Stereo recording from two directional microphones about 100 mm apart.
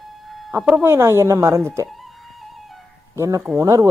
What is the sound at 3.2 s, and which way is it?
Speech, 30° right (ahead or behind).